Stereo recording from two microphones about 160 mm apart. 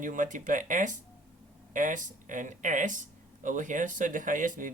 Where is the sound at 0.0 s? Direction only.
50° right (ahead or behind).